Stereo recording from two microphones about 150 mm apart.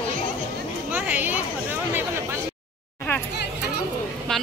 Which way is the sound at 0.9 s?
10° right (ahead or behind).